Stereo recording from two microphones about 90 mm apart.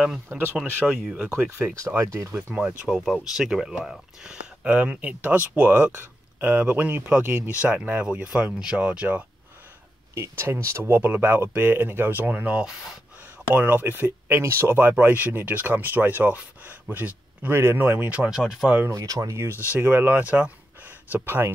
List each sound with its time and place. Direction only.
0.3 s speech: 25° right (ahead or behind)
2.3 s speech: 10° right (ahead or behind)
10.1 s speech: 30° right (ahead or behind); by 12.9 s 10° right (ahead or behind)
13.5 s speech: 20° right (ahead or behind)
18.9 s speech: 40° right (ahead or behind)
19.7 s speech: 20° right (ahead or behind)
21.1 s speech: 25° right (ahead or behind)